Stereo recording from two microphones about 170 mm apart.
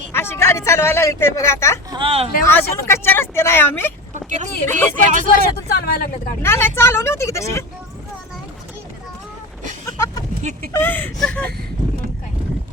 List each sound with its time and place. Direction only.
0.1 s a woman's voice: 15° left (ahead or behind)
1.9 s speech: 30° right (ahead or behind)
2.5 s speech: 15° left (ahead or behind)
4.1 s a sound: 45° right (ahead or behind)
4.6 s speech: 15° left (ahead or behind)
5.0 s speech: 50° right (ahead or behind)
5.5 s speech: 70° left (ahead or behind)
6.4 s speech: 15° left (ahead or behind)
9.8 s vehicle: 20° left (ahead or behind)
10.7 s speech: 10° left (ahead or behind)